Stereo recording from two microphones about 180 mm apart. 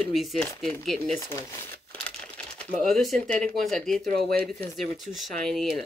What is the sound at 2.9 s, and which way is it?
Speech, centre (ahead or behind).